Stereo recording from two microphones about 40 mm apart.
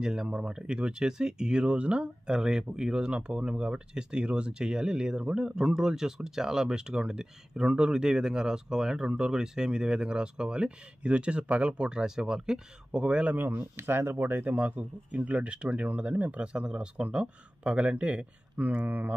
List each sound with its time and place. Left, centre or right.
0.0 s speech: centre; by 11.9 s right
11.9 s speech: centre
12.9 s speech: right
13.4 s mantra: right
13.7 s speech: right
14.3 s speech: right
18.9 s mantra: right